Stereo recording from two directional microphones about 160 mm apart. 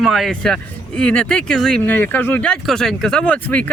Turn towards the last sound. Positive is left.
turn(degrees=10)  # may be behind; listen again after turning